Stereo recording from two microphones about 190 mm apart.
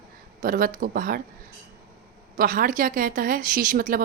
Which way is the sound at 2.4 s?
45° right (ahead or behind).